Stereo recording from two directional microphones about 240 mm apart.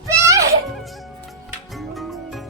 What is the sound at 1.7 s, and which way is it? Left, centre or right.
Music, centre.